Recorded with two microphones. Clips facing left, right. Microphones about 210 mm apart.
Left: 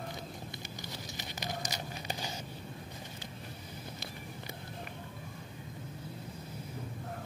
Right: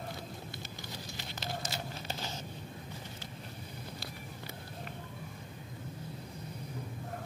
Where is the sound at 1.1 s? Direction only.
15° left (ahead or behind).